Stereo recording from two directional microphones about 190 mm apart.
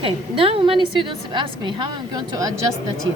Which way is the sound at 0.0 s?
30° right (ahead or behind).